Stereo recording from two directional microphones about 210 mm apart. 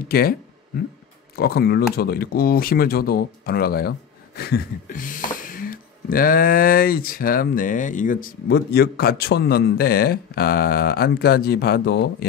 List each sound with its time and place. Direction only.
0.1 s speech: 45° left (ahead or behind)